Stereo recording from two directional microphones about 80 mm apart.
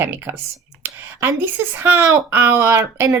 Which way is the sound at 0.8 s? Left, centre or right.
Right.